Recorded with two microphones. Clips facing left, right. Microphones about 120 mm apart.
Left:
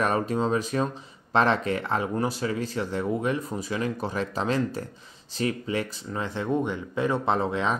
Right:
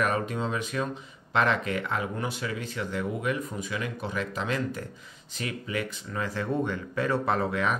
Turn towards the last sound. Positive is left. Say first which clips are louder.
# left 2 dB
turn(degrees=25)  # may be behind; listen again after turning